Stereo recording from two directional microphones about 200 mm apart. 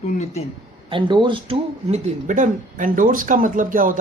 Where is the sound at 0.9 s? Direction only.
25° right (ahead or behind).